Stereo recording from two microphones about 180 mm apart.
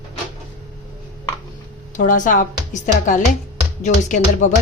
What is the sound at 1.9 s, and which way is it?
Speech, 45° left (ahead or behind).